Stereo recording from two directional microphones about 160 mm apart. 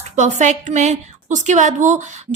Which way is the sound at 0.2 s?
50° right (ahead or behind).